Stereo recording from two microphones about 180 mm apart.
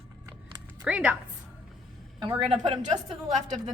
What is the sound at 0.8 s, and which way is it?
Speech, 5° right (ahead or behind).